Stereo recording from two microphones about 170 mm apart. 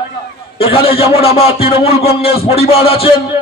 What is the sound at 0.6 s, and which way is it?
A man's voice, 30° left (ahead or behind).